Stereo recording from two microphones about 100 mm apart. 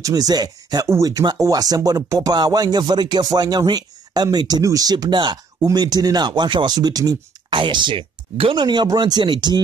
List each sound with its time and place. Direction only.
0.0 s speech: 40° right (ahead or behind)
7.4 s speech: 55° right (ahead or behind)
8.6 s speech: 45° right (ahead or behind)